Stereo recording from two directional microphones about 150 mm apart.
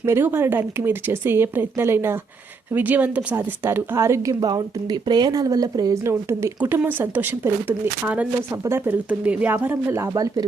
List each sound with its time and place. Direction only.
0.0 s a woman's voice: 15° right (ahead or behind)